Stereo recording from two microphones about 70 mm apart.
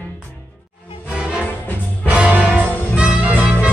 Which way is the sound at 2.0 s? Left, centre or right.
Centre.